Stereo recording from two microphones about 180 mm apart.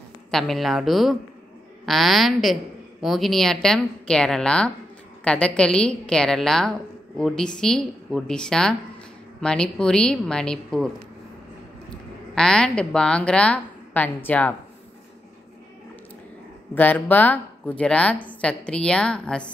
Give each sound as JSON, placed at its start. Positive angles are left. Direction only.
{"t": 0.3, "sound": "a woman's voice", "side_deg": 0}
{"t": 12.4, "sound": "a woman's voice", "side_deg": 5}
{"t": 16.7, "sound": "speech", "side_deg": 10}